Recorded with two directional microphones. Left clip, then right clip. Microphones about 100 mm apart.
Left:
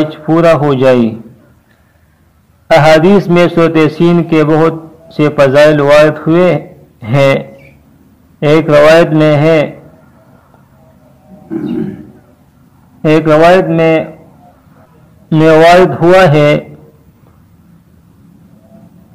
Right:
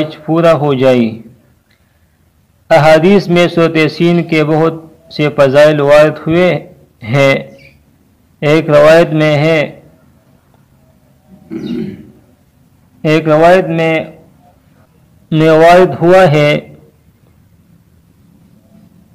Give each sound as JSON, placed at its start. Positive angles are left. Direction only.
{"t": 0.0, "sound": "a man's voice", "side_deg": 0}
{"t": 2.7, "sound": "a man's voice", "side_deg": -5}
{"t": 11.4, "sound": "wild animals", "side_deg": 0}
{"t": 13.0, "sound": "a man's voice", "side_deg": 0}
{"t": 15.2, "sound": "a man's voice", "side_deg": -5}